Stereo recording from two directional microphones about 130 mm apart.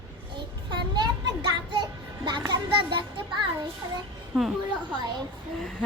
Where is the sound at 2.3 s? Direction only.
35° right (ahead or behind).